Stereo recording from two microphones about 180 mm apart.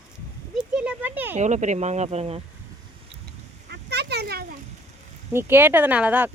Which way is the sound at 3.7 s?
65° right (ahead or behind).